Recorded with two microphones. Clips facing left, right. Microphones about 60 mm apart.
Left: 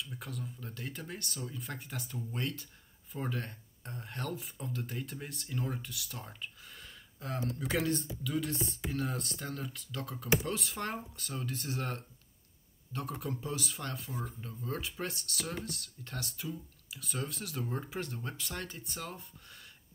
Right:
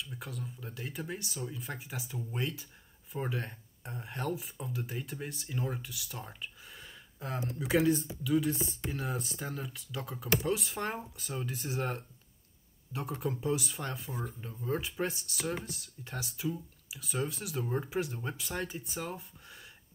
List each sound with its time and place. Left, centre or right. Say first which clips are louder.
0.0 s speech: even; centre
13.2 s speech: right 5 dB; centre